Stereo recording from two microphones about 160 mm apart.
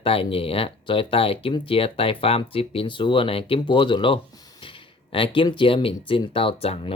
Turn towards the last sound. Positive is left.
turn(degrees=35)  # may be behind; listen again after turning